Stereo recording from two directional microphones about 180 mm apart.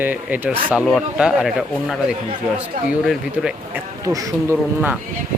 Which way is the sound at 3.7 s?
20° right (ahead or behind).